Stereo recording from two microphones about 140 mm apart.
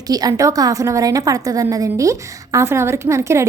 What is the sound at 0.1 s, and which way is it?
A woman's voice, 25° right (ahead or behind).